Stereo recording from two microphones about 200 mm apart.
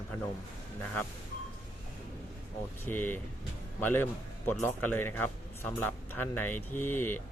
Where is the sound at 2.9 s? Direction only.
10° left (ahead or behind).